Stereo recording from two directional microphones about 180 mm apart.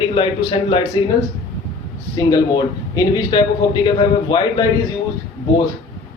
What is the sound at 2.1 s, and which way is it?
A man's voice, 20° left (ahead or behind).